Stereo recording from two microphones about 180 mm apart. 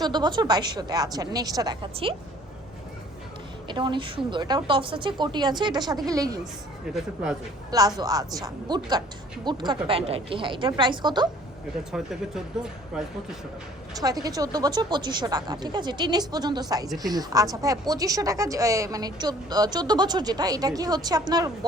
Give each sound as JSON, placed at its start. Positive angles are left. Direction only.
{"t": 0.0, "sound": "speech", "side_deg": -25}
{"t": 3.7, "sound": "speech", "side_deg": -25}
{"t": 6.4, "sound": "speech", "side_deg": -5}
{"t": 7.7, "sound": "speech", "side_deg": -20}
{"t": 11.9, "sound": "speech", "side_deg": -5}
{"t": 14.0, "sound": "speech", "side_deg": -20}